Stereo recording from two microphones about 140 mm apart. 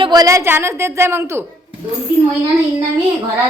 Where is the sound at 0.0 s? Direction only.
30° right (ahead or behind).